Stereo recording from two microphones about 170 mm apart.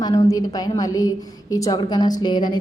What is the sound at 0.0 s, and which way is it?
A woman's voice, 20° left (ahead or behind).